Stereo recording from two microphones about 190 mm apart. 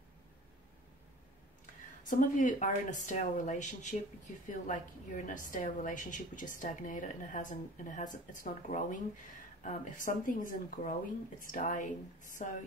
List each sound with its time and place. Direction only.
2.0 s a woman's voice: 45° left (ahead or behind)